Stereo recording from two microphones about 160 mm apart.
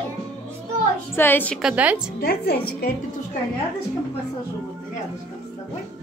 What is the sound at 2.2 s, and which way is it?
Speech, 75° left (ahead or behind).